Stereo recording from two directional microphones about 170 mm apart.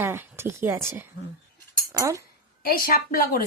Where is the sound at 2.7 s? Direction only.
60° left (ahead or behind).